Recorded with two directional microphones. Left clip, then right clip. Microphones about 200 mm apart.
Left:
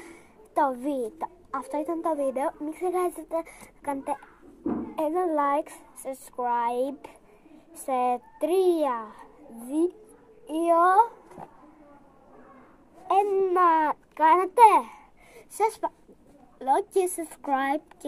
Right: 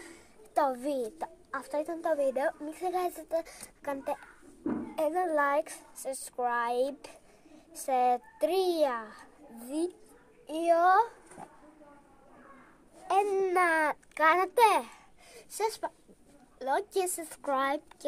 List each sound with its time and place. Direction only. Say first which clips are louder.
0.7 s a woman's voice: left 3 dB; 15° right (ahead or behind)
13.1 s a child's voice: left 4 dB; 20° right (ahead or behind)